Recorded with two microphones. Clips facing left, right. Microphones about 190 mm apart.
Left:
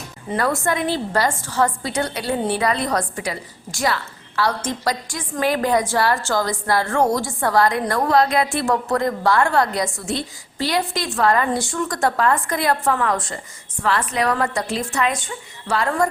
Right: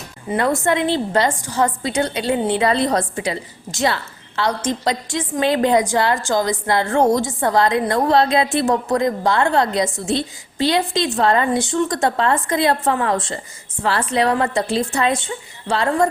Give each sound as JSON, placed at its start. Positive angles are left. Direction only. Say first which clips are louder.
{"t": 0.3, "sound": "a woman's voice", "louder": "right 3 dB", "side_deg": -10}
{"t": 0.6, "sound": "a woman's voice", "louder": "right 3 dB", "side_deg": -25}